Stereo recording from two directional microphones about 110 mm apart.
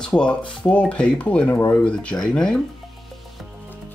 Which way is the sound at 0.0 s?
10° left (ahead or behind).